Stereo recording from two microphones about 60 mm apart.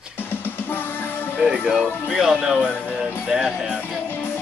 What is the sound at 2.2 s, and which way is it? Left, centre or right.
Speech, centre.